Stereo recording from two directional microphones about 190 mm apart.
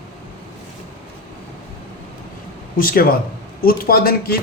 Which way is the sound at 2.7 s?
50° left (ahead or behind).